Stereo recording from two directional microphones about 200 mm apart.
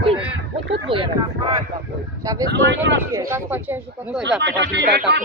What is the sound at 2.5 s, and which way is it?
Speech, 65° right (ahead or behind).